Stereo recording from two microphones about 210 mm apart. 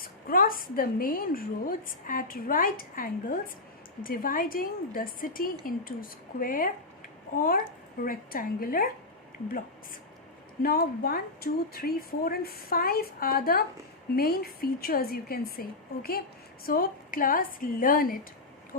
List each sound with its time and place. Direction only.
0.0 s a woman's voice: 45° left (ahead or behind)
10.6 s a woman's voice: 45° left (ahead or behind)
16.6 s a woman's voice: 40° left (ahead or behind)